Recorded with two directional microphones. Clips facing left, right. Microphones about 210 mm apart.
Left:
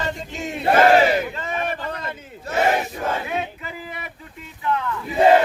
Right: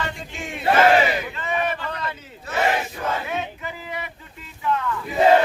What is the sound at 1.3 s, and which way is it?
Crowd, 40° left (ahead or behind).